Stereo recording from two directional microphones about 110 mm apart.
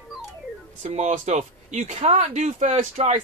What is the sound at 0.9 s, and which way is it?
Speech, 90° right.